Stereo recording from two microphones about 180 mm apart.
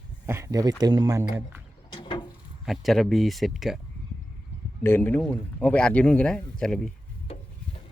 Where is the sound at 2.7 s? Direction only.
Centre (ahead or behind).